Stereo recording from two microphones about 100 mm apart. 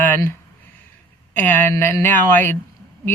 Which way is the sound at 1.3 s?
20° left (ahead or behind).